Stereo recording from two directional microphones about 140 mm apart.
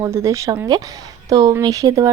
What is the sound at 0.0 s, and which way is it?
A woman's voice, 20° right (ahead or behind).